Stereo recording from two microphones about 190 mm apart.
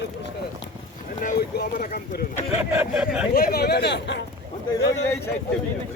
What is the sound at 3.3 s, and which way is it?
Speech, 50° left (ahead or behind).